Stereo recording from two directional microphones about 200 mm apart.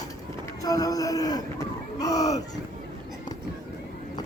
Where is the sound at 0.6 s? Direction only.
20° left (ahead or behind).